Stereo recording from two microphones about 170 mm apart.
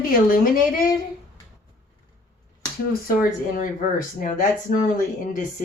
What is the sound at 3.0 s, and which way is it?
Speech, 55° left (ahead or behind).